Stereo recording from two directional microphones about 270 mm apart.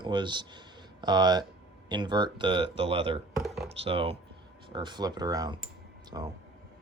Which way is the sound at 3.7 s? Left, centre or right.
Right.